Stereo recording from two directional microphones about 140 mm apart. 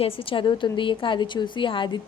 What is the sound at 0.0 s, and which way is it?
A woman's voice, 40° left (ahead or behind).